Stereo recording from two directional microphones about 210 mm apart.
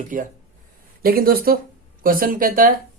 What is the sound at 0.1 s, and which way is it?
Speech, 40° right (ahead or behind).